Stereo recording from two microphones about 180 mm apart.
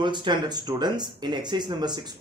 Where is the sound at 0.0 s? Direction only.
25° right (ahead or behind).